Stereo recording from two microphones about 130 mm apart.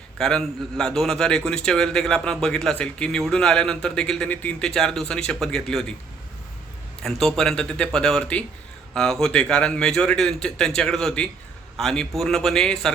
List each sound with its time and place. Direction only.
0.2 s a man's voice: 5° left (ahead or behind)
7.0 s a man's voice: centre (ahead or behind)